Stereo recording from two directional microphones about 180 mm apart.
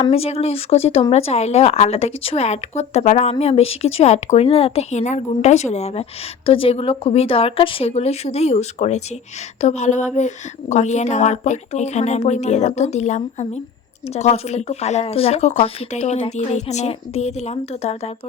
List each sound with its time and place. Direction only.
0.0 s speech: 35° left (ahead or behind)